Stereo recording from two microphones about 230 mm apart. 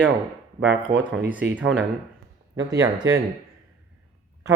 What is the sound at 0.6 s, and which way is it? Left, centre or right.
Speech, right.